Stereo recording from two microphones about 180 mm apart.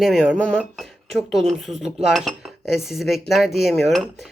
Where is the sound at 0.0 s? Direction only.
Centre (ahead or behind).